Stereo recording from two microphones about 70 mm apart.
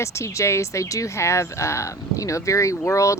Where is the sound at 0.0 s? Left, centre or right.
Left.